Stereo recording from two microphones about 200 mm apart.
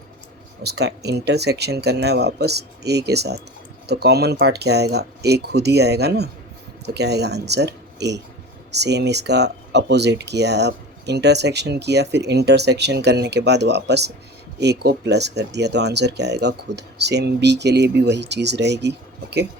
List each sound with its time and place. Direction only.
0.6 s speech: 55° right (ahead or behind)